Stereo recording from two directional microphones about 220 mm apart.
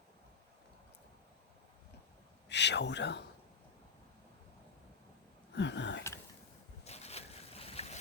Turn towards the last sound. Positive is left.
turn(degrees=30)  # may be behind; listen again after turning